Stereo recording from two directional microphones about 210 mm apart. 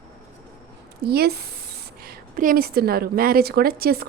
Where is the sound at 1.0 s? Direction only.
50° right (ahead or behind).